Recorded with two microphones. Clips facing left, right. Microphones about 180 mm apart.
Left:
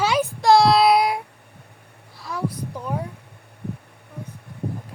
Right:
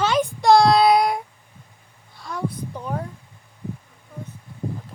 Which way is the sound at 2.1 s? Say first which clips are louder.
Even; 5° left (ahead or behind).